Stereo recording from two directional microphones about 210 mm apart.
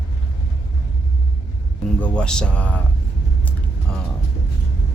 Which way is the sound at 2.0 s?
5° left (ahead or behind).